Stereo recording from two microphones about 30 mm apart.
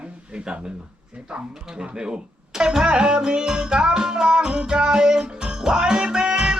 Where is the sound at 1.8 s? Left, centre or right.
Right.